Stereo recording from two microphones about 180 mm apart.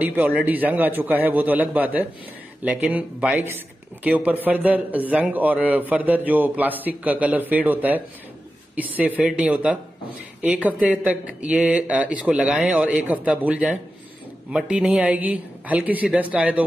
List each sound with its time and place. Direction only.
0.0 s a man's voice: 10° right (ahead or behind)